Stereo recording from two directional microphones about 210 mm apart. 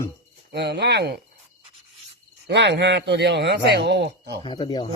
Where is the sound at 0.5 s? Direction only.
55° right (ahead or behind).